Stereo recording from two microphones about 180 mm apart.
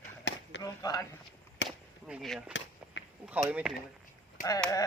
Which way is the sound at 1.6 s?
75° left (ahead or behind).